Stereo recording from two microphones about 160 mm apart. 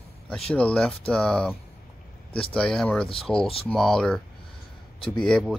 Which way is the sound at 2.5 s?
5° left (ahead or behind).